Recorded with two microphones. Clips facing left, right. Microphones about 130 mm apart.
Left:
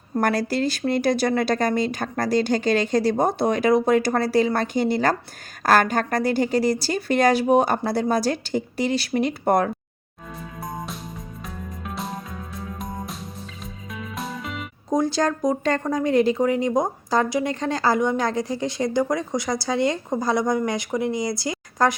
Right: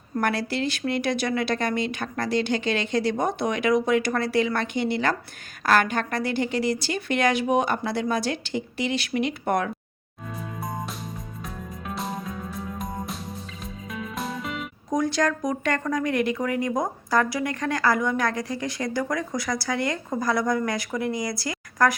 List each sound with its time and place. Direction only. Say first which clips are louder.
0.2 s speech: left 4 dB; 40° left (ahead or behind)
11.4 s music: even; centre (ahead or behind)
14.8 s speech: left 2 dB; 30° left (ahead or behind)